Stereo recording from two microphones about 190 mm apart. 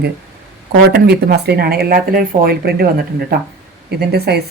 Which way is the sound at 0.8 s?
55° right (ahead or behind).